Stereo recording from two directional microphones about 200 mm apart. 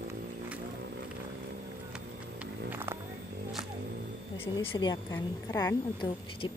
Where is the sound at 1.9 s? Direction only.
10° right (ahead or behind).